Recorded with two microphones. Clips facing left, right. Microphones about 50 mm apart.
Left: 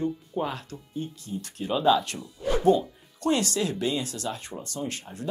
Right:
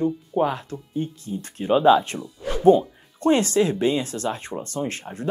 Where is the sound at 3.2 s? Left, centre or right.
Right.